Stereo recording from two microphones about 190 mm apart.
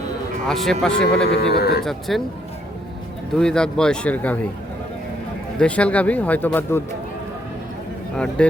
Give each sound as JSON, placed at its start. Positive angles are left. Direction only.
{"t": 0.4, "sound": "a man's voice", "side_deg": 0}
{"t": 1.4, "sound": "speech", "side_deg": 55}
{"t": 1.8, "sound": "a man's voice", "side_deg": 0}
{"t": 3.3, "sound": "a man's voice", "side_deg": 5}
{"t": 5.5, "sound": "speech", "side_deg": 5}
{"t": 8.1, "sound": "a man's voice", "side_deg": 5}